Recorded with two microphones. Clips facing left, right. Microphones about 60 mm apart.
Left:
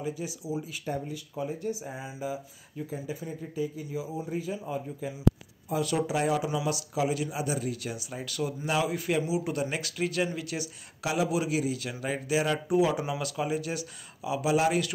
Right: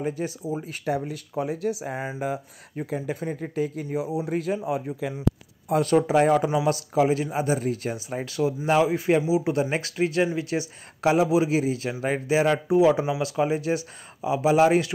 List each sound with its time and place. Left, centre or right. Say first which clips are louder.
0.0 s speech: right 6 dB; right
0.8 s speech: right 6 dB; right
2.0 s speech: right 3 dB; right
5.7 s speech: right 8 dB; right